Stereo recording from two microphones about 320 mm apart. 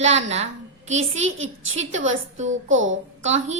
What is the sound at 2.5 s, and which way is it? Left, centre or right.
Speech, right.